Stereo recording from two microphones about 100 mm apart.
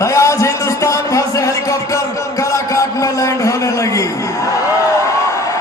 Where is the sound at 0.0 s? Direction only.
30° left (ahead or behind).